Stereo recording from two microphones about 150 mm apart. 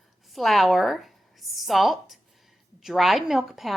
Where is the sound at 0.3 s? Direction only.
Centre (ahead or behind).